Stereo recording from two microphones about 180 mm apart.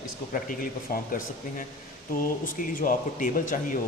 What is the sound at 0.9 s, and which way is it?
Speech, 55° left (ahead or behind).